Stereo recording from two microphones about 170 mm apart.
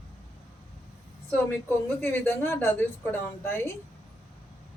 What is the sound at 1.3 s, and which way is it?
A woman's voice, 10° left (ahead or behind).